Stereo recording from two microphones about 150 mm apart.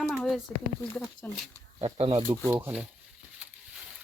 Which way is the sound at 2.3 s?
15° right (ahead or behind).